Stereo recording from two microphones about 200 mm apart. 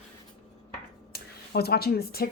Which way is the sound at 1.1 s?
50° left (ahead or behind).